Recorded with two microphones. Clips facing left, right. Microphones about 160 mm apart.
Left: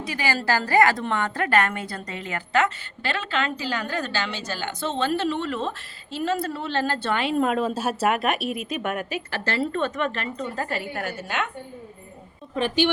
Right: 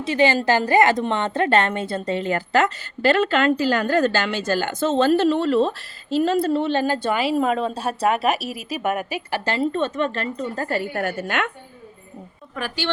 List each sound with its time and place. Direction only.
0.0 s a woman's voice: 25° right (ahead or behind); by 11.4 s 55° right (ahead or behind)
12.5 s a woman's voice: 20° left (ahead or behind)